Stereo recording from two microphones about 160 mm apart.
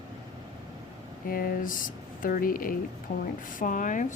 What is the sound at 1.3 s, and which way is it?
Speech, 65° left (ahead or behind).